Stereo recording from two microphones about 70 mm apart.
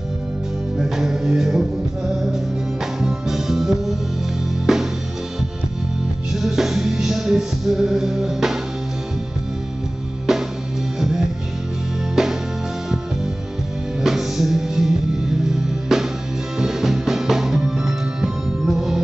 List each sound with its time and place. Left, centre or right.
0.7 s music: centre
3.0 s music: centre
6.4 s music: centre
12.2 s music: centre
14.0 s music: centre